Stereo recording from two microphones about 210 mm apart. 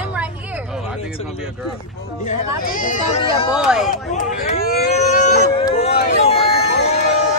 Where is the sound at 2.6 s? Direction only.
40° left (ahead or behind).